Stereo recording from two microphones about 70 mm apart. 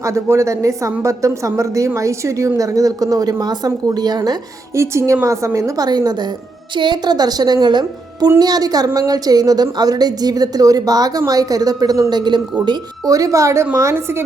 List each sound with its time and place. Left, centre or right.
0.0 s a woman's voice: right
4.7 s a woman's voice: right
5.8 s a woman's voice: right
8.4 s a woman's voice: right
12.1 s a woman's voice: right
13.9 s speech: right